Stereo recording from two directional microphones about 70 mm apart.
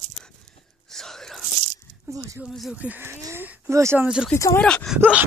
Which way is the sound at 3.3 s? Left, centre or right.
Right.